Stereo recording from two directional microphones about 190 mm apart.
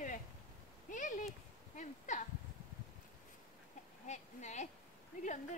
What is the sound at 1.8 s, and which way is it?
Speech, 40° left (ahead or behind).